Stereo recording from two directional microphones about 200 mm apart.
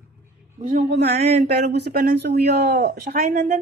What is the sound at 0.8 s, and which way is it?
A man's voice, 60° right (ahead or behind).